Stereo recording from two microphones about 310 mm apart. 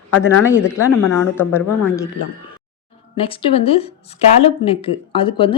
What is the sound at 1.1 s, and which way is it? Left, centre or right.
Speech, centre.